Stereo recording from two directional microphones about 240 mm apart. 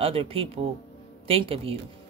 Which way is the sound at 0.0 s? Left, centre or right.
Right.